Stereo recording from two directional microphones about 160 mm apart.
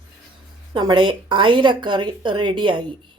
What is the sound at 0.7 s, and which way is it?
Speech, 30° right (ahead or behind).